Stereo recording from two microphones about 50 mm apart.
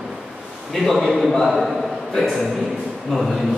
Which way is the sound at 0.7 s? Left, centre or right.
Centre.